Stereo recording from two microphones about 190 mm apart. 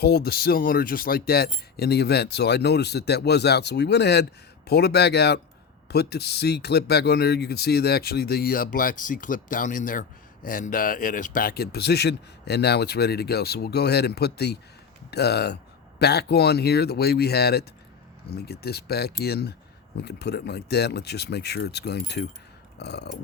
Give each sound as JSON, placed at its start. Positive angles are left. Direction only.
{"t": 0.0, "sound": "speech", "side_deg": 55}